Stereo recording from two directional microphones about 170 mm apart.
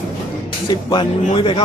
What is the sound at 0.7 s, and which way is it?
Speech, 25° left (ahead or behind).